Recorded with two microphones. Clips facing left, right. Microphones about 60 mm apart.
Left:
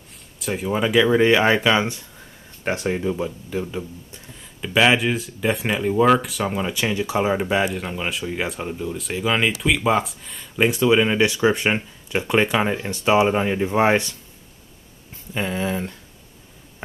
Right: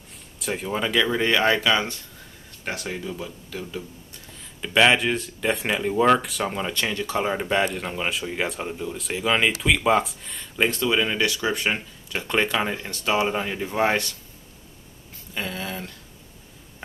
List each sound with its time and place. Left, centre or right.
0.4 s speech: centre; by 3.8 s left
4.6 s speech: centre; by 14.1 s left
15.3 s speech: left